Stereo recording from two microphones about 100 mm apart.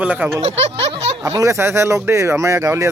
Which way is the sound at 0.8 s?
90° right.